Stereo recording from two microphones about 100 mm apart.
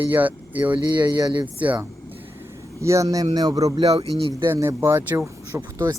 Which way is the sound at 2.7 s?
30° right (ahead or behind).